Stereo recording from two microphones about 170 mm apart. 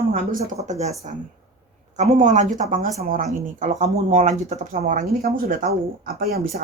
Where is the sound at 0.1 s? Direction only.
55° right (ahead or behind).